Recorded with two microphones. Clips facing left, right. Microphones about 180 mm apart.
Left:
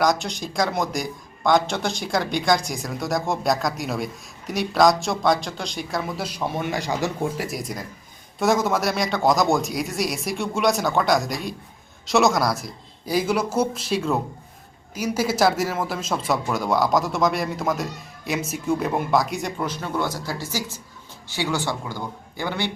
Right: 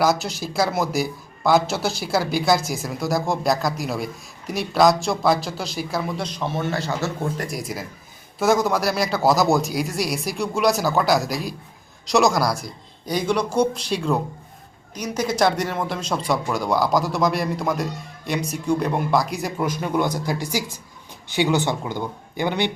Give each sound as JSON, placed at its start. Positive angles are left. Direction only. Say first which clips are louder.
{"t": 0.0, "sound": "speech", "louder": "right 1 dB", "side_deg": -5}
{"t": 7.4, "sound": "speech", "louder": "right 1 dB", "side_deg": 0}